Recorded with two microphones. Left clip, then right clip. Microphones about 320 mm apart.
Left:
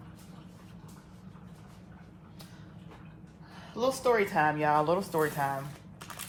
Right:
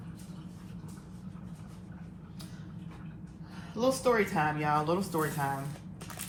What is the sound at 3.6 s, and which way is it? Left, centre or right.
Speech, left.